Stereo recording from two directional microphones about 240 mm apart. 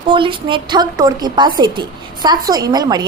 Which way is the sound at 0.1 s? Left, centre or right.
Right.